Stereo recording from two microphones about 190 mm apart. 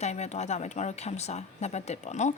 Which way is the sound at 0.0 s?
35° left (ahead or behind).